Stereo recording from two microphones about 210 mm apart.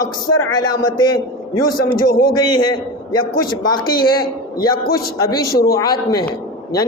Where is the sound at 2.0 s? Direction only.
45° left (ahead or behind).